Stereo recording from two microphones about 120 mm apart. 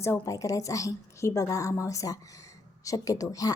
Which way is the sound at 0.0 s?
25° left (ahead or behind).